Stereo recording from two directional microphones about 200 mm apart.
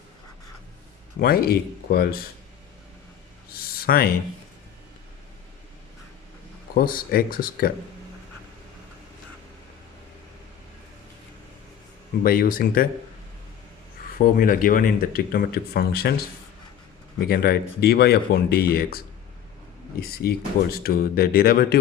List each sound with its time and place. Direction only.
1.2 s speech: 50° left (ahead or behind)
3.5 s a sound: 50° left (ahead or behind)
6.7 s speech: 45° left (ahead or behind)
12.2 s speech: 45° left (ahead or behind)
14.2 s speech: 45° left (ahead or behind)
17.2 s speech: 50° left (ahead or behind)